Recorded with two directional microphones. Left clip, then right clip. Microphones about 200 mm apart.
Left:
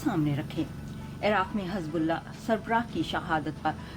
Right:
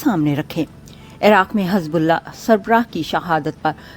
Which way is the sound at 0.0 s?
50° right (ahead or behind).